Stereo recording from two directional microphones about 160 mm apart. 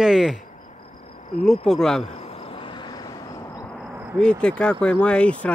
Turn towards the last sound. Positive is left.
turn(degrees=5)  # may be behind; listen again after turning